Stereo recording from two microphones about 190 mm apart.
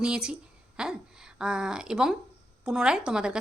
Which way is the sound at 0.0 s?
5° right (ahead or behind).